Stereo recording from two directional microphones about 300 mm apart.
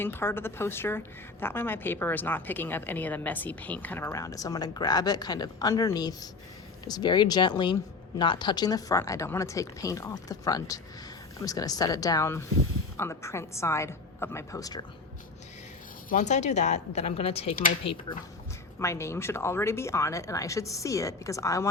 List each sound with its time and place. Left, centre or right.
0.0 s a woman's voice: centre
16.0 s speech: left
18.8 s a woman's voice: centre